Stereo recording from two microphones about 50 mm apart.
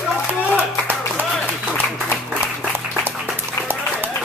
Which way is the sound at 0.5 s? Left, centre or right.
Right.